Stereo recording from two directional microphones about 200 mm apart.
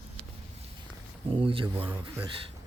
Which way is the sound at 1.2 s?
25° right (ahead or behind).